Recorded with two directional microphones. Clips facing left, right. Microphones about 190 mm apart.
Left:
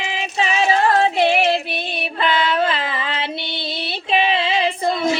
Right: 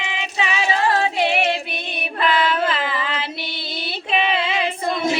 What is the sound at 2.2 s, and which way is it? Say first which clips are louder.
Child singing: left 1 dB; 25° left (ahead or behind).